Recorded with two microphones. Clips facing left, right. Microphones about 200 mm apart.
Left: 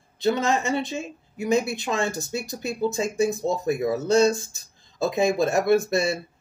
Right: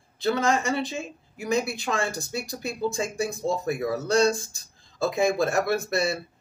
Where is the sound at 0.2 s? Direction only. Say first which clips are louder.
Left 1 dB; 20° left (ahead or behind).